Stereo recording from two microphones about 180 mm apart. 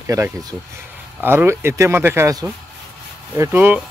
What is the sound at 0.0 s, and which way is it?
Speech, 15° right (ahead or behind).